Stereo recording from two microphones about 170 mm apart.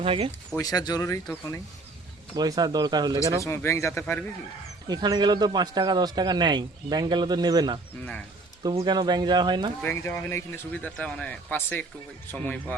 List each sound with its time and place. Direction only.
0.0 s speech: 35° right (ahead or behind)
0.3 s speech: 15° left (ahead or behind)
2.3 s speech: 25° right (ahead or behind)
3.4 s speech: 15° left (ahead or behind)
4.9 s speech: 25° right (ahead or behind)
9.8 s speech: 15° left (ahead or behind)